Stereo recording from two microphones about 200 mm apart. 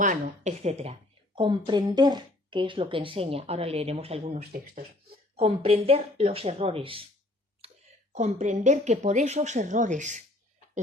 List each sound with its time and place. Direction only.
0.0 s a woman's voice: 40° right (ahead or behind)
5.4 s a woman's voice: 30° right (ahead or behind)
7.6 s a sound: 30° right (ahead or behind)
8.1 s speech: 35° right (ahead or behind)